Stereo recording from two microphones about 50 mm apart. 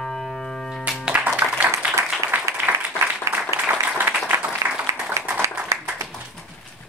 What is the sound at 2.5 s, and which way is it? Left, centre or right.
Applause, right.